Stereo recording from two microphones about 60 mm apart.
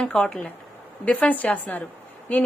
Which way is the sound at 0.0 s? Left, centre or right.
Centre.